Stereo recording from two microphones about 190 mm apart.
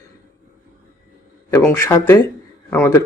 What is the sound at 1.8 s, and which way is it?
Speech, 15° left (ahead or behind).